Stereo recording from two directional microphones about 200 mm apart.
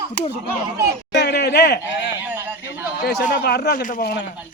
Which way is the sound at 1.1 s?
55° left (ahead or behind).